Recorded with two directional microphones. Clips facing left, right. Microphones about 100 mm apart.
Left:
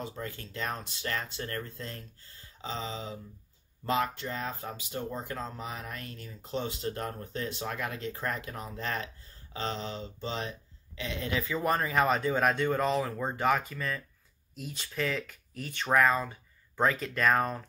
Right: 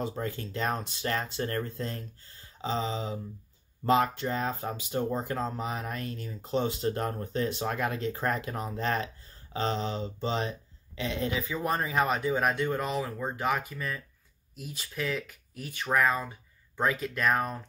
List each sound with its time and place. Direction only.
0.0 s speech: 30° right (ahead or behind)
1.8 s a sound: 30° right (ahead or behind)
3.8 s speech: 30° right (ahead or behind)
11.5 s speech: 10° right (ahead or behind)